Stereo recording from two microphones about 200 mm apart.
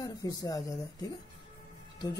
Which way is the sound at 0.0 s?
20° left (ahead or behind).